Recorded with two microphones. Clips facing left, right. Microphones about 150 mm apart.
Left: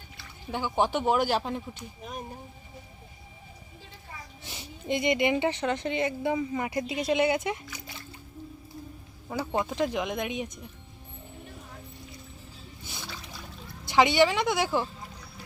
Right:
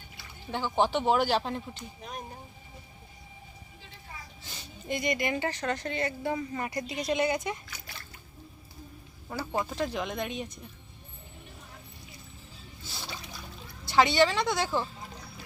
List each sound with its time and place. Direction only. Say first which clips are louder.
0.5 s speech: even; 10° left (ahead or behind)
4.4 s speech: left 4 dB; 20° left (ahead or behind)
9.3 s speech: left 3 dB; 15° left (ahead or behind)
13.8 s speech: left 2 dB; 15° left (ahead or behind)